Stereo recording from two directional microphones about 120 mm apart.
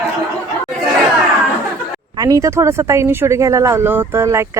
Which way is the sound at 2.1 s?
30° right (ahead or behind).